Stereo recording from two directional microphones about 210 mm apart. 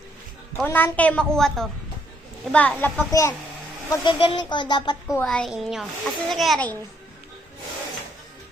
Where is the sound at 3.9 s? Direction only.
20° left (ahead or behind).